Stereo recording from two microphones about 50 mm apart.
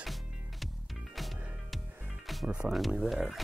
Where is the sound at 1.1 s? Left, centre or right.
Centre.